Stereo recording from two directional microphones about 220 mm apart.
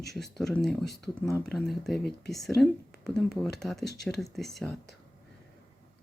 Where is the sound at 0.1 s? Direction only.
Centre (ahead or behind).